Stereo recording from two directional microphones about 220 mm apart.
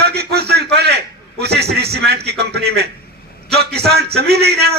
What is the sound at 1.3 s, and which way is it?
A man's voice, 50° right (ahead or behind).